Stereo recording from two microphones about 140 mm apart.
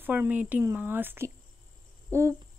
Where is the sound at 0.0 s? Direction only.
15° right (ahead or behind).